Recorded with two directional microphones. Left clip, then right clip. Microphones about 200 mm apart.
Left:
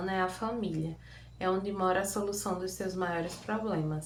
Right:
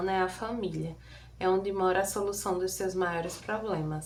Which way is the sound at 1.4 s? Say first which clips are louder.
Right 3 dB; 20° right (ahead or behind).